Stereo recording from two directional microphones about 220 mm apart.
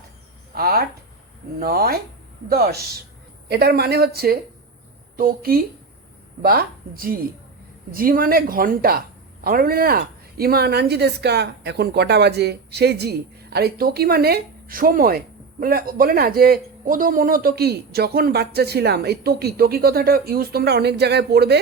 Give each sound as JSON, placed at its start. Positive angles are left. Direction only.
{"t": 0.5, "sound": "speech", "side_deg": -45}